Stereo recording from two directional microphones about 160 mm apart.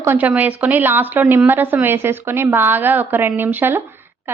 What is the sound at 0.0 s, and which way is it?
A woman's voice, 10° right (ahead or behind).